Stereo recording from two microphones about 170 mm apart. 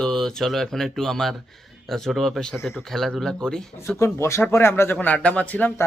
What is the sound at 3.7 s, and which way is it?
Speech, 15° left (ahead or behind).